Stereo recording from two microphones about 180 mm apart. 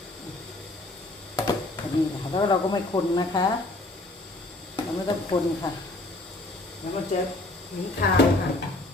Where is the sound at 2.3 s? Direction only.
25° left (ahead or behind).